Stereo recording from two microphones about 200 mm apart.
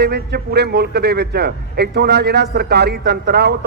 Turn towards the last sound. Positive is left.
turn(degrees=-55)  # may be behind; listen again after turning